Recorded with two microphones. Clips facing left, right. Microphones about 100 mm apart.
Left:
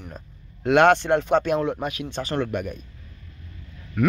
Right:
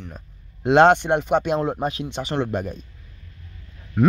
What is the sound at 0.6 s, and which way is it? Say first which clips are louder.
Speech: right 2 dB; 25° right (ahead or behind).